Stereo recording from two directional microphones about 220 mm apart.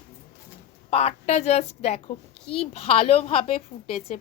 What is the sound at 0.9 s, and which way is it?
A woman's voice, 30° left (ahead or behind).